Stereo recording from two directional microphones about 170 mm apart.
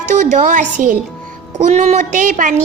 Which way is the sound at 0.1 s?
45° right (ahead or behind).